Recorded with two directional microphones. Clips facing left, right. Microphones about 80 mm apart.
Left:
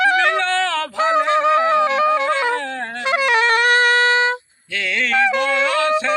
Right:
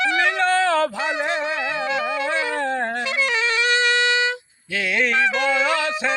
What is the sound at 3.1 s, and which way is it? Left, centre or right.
Music, left.